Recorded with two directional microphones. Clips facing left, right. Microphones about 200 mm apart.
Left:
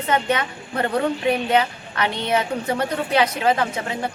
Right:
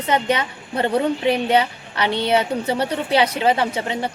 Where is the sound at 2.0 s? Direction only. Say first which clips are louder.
Right 3 dB; 30° right (ahead or behind).